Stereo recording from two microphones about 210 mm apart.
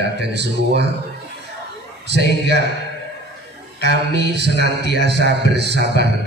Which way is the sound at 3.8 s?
55° right (ahead or behind).